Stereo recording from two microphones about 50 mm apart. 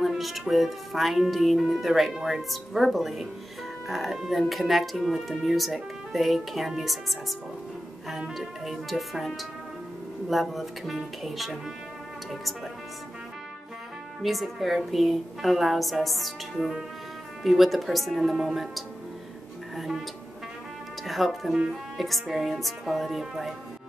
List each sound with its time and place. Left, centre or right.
0.0 s speech: centre
8.4 s speech: centre
14.2 s speech: centre
21.0 s speech: centre